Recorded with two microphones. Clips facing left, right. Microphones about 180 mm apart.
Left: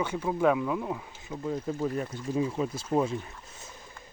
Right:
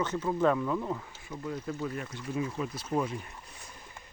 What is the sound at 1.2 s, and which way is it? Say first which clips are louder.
Speech: left 4 dB; 25° left (ahead or behind).